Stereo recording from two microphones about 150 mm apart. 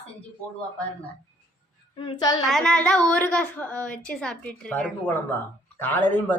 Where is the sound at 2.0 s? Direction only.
30° left (ahead or behind).